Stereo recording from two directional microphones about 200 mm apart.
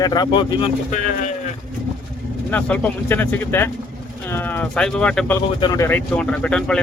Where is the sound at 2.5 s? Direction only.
10° left (ahead or behind).